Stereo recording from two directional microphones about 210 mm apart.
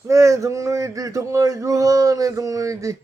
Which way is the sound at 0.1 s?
15° right (ahead or behind).